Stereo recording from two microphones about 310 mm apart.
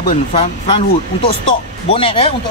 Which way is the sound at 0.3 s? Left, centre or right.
Centre.